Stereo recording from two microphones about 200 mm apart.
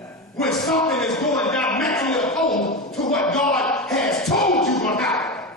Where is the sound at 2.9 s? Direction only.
5° left (ahead or behind).